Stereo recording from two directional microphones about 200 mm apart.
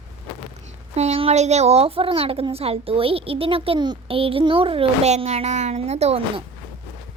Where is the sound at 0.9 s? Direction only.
30° right (ahead or behind).